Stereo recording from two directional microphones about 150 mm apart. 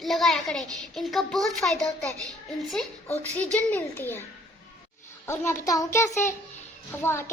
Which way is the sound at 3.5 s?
10° left (ahead or behind).